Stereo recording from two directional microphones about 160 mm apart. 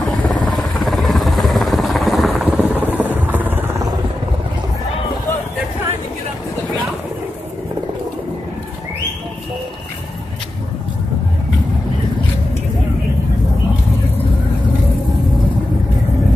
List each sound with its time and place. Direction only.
0.0 s helicopter: centre (ahead or behind)
0.5 s vehicle: centre (ahead or behind)
2.7 s a sound: 10° right (ahead or behind)
3.3 s vehicle: 10° right (ahead or behind)